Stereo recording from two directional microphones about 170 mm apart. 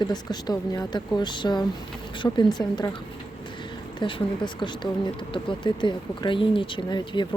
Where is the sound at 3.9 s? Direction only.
30° left (ahead or behind).